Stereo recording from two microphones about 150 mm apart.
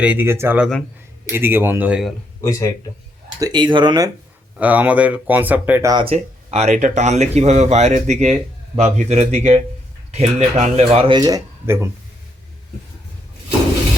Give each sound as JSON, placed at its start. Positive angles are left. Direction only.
{"t": 0.0, "sound": "speech", "side_deg": -10}
{"t": 2.4, "sound": "speech", "side_deg": 20}
{"t": 3.4, "sound": "speech", "side_deg": -30}
{"t": 4.5, "sound": "speech", "side_deg": -10}
{"t": 5.9, "sound": "speech", "side_deg": -30}
{"t": 6.5, "sound": "speech", "side_deg": -45}
{"t": 11.1, "sound": "speech", "side_deg": -25}